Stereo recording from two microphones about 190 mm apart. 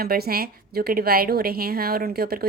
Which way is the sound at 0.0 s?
55° right (ahead or behind).